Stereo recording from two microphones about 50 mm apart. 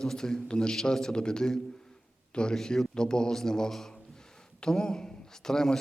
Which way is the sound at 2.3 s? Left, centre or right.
Centre.